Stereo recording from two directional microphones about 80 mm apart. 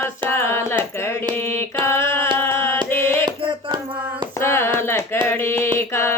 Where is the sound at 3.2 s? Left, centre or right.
Right.